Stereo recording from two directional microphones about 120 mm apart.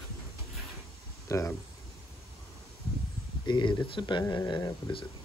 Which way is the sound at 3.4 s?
40° left (ahead or behind).